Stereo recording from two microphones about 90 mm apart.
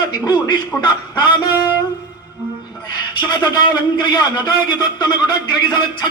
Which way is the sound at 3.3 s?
55° left (ahead or behind).